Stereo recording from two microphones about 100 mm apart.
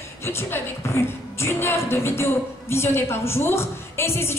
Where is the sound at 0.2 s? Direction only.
25° left (ahead or behind).